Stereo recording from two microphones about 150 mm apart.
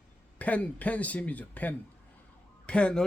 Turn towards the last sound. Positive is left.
turn(degrees=5)  # may be behind; listen again after turning